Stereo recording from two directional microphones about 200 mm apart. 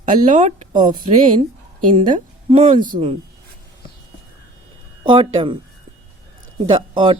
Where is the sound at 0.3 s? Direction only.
35° right (ahead or behind).